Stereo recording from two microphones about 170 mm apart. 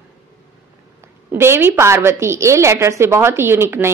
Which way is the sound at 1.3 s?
15° right (ahead or behind).